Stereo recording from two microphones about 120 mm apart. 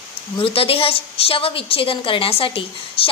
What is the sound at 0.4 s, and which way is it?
A woman's voice, 50° left (ahead or behind).